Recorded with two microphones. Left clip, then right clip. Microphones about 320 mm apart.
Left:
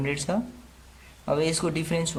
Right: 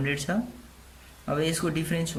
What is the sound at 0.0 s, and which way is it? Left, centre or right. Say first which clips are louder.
Speech: left 1 dB; centre.